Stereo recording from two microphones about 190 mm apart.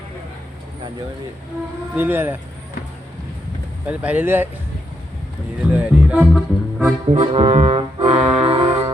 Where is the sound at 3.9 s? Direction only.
10° right (ahead or behind).